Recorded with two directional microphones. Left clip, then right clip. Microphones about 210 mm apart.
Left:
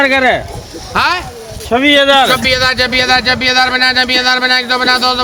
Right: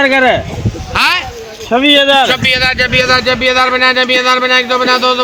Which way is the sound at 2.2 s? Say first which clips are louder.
Even; 45° left (ahead or behind).